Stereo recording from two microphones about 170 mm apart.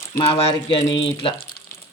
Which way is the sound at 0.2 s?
35° left (ahead or behind).